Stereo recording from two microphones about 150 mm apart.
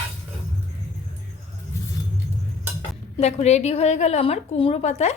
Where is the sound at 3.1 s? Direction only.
45° left (ahead or behind).